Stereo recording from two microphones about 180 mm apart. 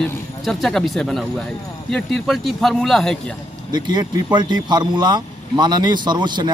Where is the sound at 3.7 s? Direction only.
25° right (ahead or behind).